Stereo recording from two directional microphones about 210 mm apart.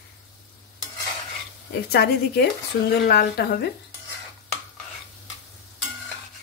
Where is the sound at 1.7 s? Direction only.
50° left (ahead or behind).